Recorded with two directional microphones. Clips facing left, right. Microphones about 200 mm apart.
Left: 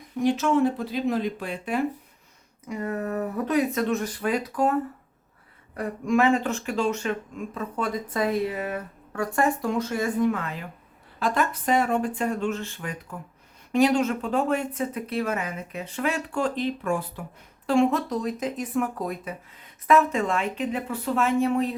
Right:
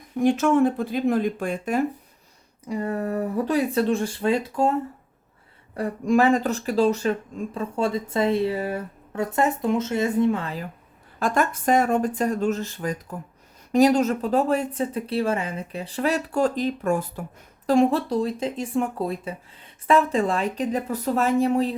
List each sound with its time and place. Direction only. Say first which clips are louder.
0.2 s speech: right 3 dB; 50° right (ahead or behind)
2.6 s speech: right 3 dB; 30° right (ahead or behind)
11.2 s speech: right 2 dB; 45° right (ahead or behind)